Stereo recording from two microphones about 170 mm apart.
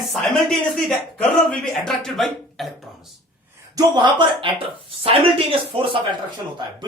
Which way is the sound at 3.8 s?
25° right (ahead or behind).